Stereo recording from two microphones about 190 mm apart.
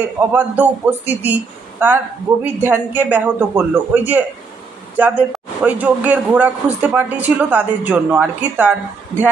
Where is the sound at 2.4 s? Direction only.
10° right (ahead or behind).